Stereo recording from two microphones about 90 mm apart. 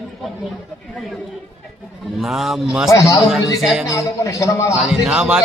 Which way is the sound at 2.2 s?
5° right (ahead or behind).